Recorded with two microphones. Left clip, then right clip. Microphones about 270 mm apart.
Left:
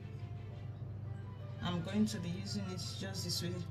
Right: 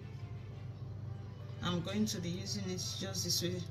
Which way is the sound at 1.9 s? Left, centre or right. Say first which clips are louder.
Right 1 dB; centre.